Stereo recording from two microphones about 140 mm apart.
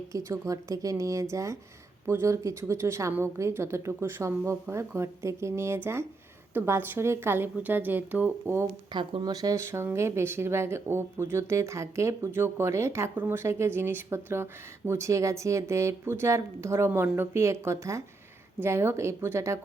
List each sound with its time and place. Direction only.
0.1 s a woman's voice: 20° right (ahead or behind)
8.9 s speech: 35° right (ahead or behind)